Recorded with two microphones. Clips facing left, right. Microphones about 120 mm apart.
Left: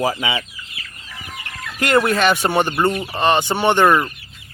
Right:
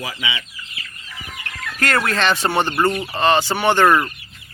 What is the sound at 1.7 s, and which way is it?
Speech, 15° left (ahead or behind).